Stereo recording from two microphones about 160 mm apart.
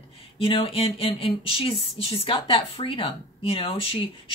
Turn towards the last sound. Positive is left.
turn(degrees=35)  # may be behind; listen again after turning